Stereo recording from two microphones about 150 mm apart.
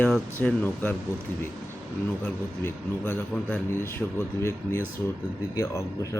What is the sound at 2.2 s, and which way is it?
A man's voice, 15° left (ahead or behind).